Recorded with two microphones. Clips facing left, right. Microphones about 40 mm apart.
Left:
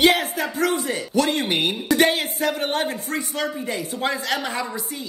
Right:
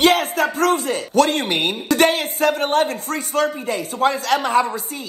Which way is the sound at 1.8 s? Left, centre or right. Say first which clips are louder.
Right 2 dB; right.